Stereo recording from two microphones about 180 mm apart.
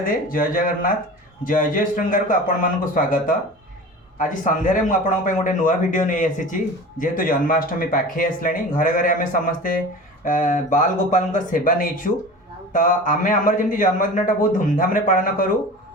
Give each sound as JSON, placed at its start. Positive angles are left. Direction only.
{"t": 0.0, "sound": "speech", "side_deg": 50}